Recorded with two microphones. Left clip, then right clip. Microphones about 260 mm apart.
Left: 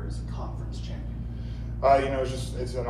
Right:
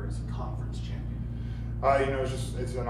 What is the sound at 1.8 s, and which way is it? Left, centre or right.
Speech, left.